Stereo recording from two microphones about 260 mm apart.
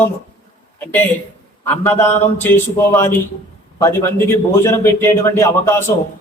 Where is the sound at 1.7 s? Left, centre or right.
Centre.